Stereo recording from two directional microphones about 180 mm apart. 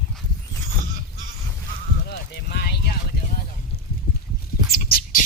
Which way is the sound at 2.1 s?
65° left (ahead or behind).